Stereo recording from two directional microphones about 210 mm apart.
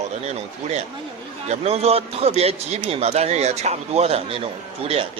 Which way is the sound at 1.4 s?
30° right (ahead or behind).